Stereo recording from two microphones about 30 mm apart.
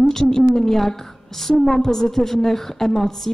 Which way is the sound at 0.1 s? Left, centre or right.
Centre.